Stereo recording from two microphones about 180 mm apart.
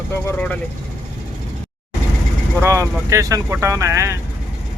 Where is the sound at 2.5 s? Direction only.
15° right (ahead or behind).